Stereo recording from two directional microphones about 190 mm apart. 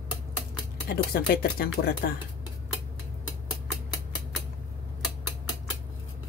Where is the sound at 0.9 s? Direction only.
55° left (ahead or behind).